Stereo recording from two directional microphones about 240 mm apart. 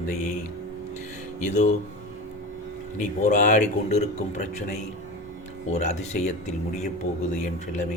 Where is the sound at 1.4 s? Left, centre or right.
Left.